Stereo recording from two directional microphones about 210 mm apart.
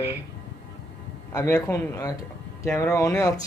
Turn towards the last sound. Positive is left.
turn(degrees=15)  # may be behind; listen again after turning